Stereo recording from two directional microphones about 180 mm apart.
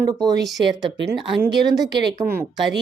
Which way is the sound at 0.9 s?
70° right (ahead or behind).